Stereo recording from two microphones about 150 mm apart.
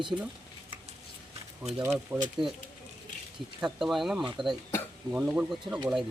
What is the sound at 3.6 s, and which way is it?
Speech, 5° right (ahead or behind).